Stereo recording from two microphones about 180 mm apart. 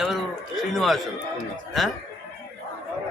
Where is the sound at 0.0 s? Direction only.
Centre (ahead or behind).